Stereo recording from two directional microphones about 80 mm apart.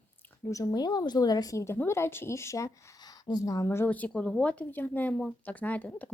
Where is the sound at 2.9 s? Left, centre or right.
Left.